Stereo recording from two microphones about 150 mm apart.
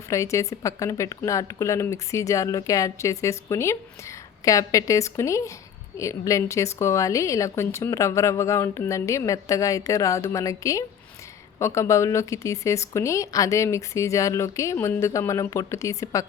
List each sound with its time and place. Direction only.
0.1 s a woman's voice: 20° left (ahead or behind)